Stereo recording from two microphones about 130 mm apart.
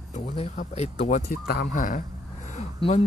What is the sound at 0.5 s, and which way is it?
Speech, 55° left (ahead or behind).